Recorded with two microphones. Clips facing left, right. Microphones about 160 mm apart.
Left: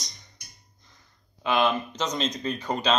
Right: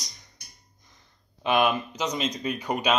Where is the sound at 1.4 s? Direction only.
15° right (ahead or behind).